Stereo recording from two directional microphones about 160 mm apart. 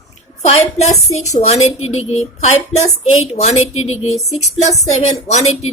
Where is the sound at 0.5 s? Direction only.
40° left (ahead or behind).